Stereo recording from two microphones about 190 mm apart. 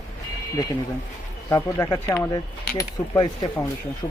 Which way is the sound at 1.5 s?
15° left (ahead or behind).